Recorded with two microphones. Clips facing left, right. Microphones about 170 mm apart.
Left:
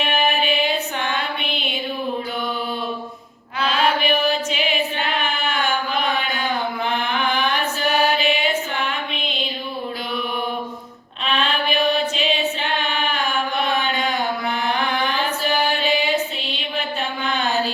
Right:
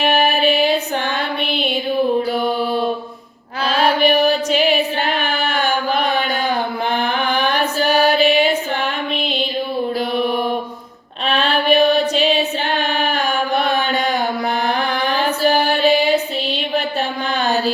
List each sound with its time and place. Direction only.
0.0 s music: 35° right (ahead or behind)
3.6 s mantra: 40° right (ahead or behind)
7.9 s music: 40° right (ahead or behind)
11.3 s mantra: 40° right (ahead or behind)
14.8 s music: 40° right (ahead or behind)